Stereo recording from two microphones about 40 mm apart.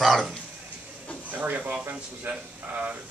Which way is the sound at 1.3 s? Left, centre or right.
Right.